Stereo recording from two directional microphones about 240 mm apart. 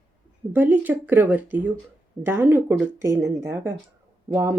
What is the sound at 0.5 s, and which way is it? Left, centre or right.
Speech, centre.